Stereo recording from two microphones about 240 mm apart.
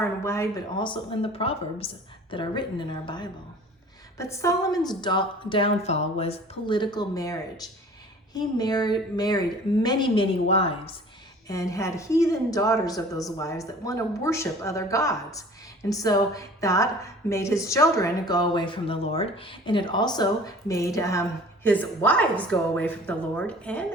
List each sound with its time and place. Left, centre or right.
0.0 s a woman's voice: centre
11.4 s a woman's voice: centre